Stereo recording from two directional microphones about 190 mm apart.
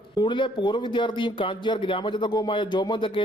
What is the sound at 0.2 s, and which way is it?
Speech, 25° left (ahead or behind).